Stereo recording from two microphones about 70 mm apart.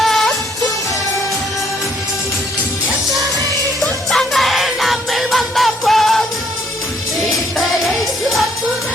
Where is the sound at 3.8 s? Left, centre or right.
Centre.